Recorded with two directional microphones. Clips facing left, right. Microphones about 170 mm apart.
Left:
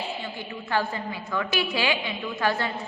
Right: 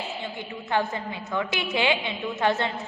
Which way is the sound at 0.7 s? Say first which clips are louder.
Right 1 dB; 20° right (ahead or behind).